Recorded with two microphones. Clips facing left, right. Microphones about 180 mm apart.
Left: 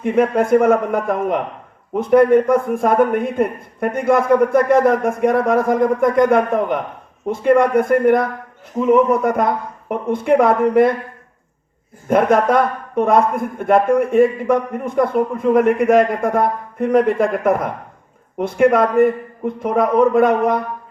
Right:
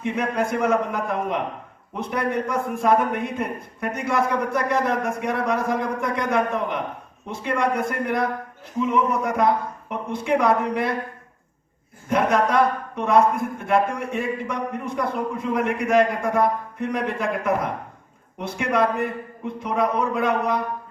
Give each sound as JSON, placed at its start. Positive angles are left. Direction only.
{"t": 0.0, "sound": "speech", "side_deg": 50}
{"t": 12.0, "sound": "speech", "side_deg": 55}